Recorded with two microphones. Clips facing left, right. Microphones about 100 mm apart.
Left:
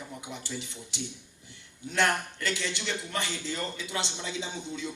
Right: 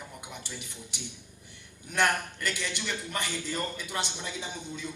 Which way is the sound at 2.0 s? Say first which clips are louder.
Even; 20° left (ahead or behind).